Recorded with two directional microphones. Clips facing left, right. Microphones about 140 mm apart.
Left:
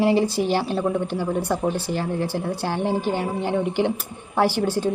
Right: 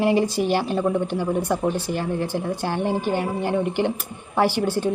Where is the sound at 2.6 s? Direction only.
10° left (ahead or behind).